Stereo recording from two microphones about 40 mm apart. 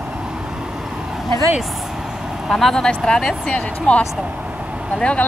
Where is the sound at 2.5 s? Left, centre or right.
Centre; by 4.0 s left.